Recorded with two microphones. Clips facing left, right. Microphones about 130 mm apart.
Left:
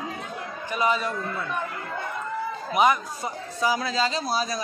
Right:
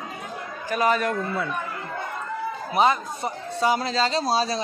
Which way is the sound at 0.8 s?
55° right (ahead or behind).